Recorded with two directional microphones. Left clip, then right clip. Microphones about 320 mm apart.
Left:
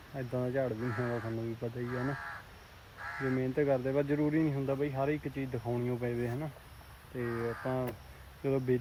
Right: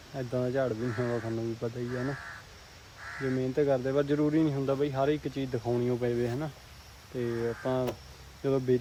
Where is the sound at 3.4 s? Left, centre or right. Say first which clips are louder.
Right 4 dB; centre.